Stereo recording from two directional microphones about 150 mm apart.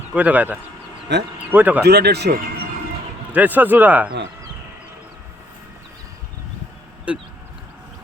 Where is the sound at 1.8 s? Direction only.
90° right.